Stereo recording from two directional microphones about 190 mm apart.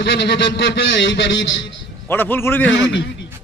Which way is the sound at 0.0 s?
65° left (ahead or behind).